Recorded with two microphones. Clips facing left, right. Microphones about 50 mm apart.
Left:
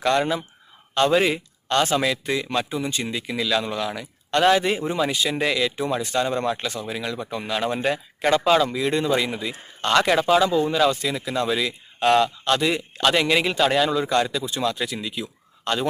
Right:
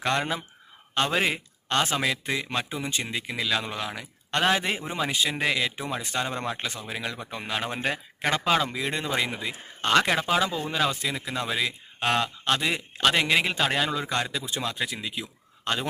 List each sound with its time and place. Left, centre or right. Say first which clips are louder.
0.0 s speech: left 5 dB; centre